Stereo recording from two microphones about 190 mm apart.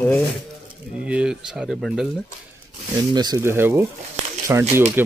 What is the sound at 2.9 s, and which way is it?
Speech, 20° right (ahead or behind).